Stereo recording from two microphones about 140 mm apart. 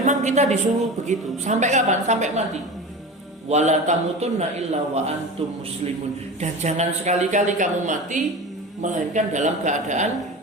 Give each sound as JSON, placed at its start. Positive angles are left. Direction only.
{"t": 0.0, "sound": "a man's voice", "side_deg": -60}
{"t": 3.5, "sound": "a man's voice", "side_deg": -55}
{"t": 6.4, "sound": "a man's voice", "side_deg": -55}